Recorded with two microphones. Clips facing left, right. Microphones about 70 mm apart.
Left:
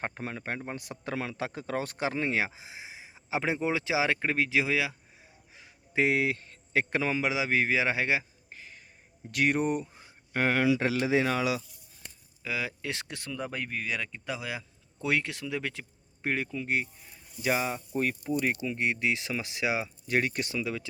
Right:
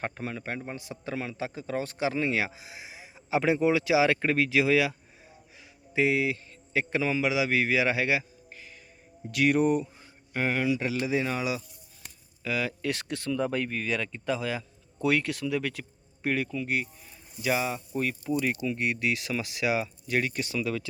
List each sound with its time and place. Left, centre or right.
0.0 s a man's voice: left; by 4.9 s centre
5.9 s a man's voice: left
10.3 s speech: left
12.4 s speech: centre
13.3 s speech: centre
17.4 s a man's voice: left
20.1 s a man's voice: left
20.6 s speech: centre